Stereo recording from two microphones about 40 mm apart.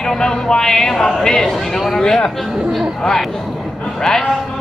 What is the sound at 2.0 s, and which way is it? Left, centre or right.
Speech, centre.